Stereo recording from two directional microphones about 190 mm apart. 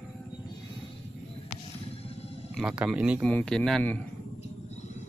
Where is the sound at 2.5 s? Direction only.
5° right (ahead or behind).